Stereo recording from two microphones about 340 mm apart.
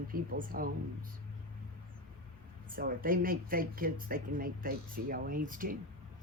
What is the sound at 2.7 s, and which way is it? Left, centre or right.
Speech, right.